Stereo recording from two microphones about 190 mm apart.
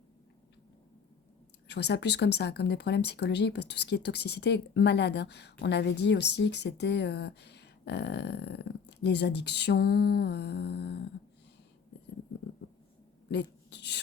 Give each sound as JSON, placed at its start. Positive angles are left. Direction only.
{"t": 1.6, "sound": "speech", "side_deg": 60}
{"t": 13.3, "sound": "speech", "side_deg": 65}